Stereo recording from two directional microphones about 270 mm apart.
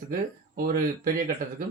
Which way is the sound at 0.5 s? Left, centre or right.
Right.